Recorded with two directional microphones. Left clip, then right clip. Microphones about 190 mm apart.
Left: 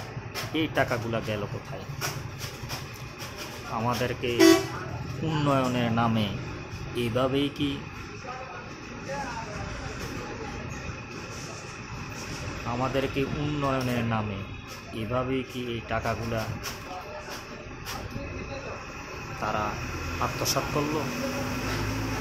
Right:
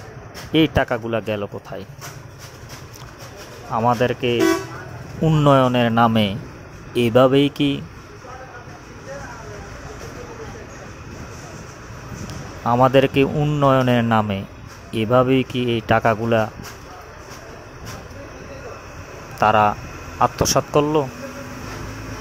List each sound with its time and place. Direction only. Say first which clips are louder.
0.5 s speech: right 9 dB; 40° right (ahead or behind)
3.7 s speech: right 11 dB; 35° right (ahead or behind)
12.7 s speech: right 14 dB; 40° right (ahead or behind)
19.4 s speech: right 15 dB; 45° right (ahead or behind)